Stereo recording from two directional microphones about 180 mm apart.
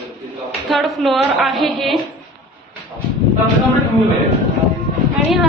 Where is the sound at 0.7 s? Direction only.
Centre (ahead or behind).